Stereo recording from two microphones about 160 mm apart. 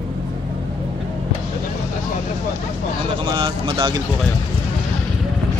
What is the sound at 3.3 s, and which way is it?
Speech, 30° right (ahead or behind).